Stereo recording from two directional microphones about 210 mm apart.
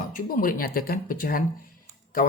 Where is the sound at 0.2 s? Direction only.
40° left (ahead or behind).